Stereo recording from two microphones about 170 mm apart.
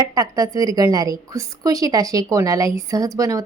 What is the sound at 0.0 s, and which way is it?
A woman's voice, 20° right (ahead or behind).